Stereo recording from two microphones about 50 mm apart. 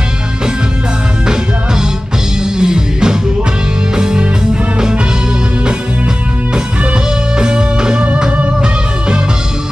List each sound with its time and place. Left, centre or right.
2.6 s music: centre
7.3 s music: centre